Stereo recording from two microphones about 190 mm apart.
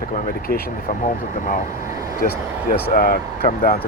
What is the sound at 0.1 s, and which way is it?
Speech, 50° left (ahead or behind).